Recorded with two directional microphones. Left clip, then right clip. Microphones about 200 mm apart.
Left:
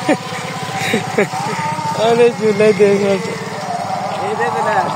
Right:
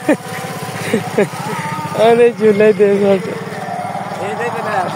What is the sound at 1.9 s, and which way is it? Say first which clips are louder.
Speech: right 3 dB; 35° right (ahead or behind).